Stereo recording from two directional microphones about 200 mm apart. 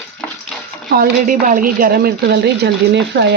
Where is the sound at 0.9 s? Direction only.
45° right (ahead or behind).